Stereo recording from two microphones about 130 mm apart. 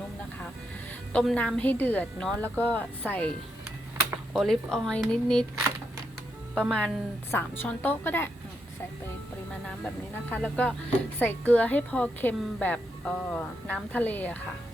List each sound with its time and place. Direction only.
1.1 s a woman's voice: 5° left (ahead or behind)
4.4 s speech: centre (ahead or behind)
6.5 s speech: 5° left (ahead or behind)
7.3 s a woman's voice: 15° left (ahead or behind)
9.5 s a woman's voice: 10° left (ahead or behind)